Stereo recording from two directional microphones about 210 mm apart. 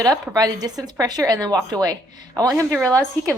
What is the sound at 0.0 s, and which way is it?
Speech, 15° right (ahead or behind).